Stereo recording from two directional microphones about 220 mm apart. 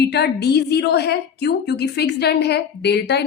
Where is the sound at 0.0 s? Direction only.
50° left (ahead or behind).